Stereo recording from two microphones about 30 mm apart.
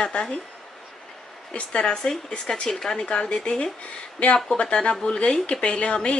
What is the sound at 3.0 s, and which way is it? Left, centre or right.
A woman's voice, left.